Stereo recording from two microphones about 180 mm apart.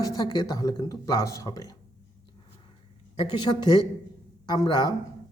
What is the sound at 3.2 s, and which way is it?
A man's voice, 25° left (ahead or behind).